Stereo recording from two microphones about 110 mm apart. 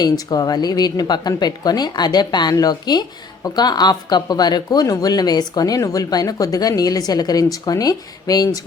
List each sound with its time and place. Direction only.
0.0 s a woman's voice: 35° left (ahead or behind)